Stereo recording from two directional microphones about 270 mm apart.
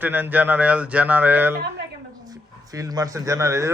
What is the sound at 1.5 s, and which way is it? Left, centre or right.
Speech, right.